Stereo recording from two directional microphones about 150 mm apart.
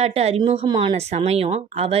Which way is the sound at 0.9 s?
45° right (ahead or behind).